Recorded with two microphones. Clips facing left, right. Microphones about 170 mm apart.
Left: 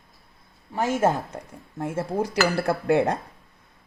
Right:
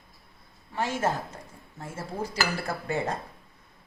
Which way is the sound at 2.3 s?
70° left (ahead or behind).